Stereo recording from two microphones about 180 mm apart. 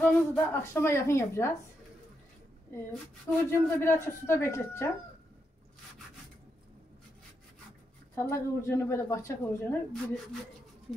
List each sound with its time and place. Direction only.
0.0 s a woman's voice: 10° left (ahead or behind)
2.7 s a woman's voice: 10° left (ahead or behind)
8.1 s a woman's voice: 15° left (ahead or behind)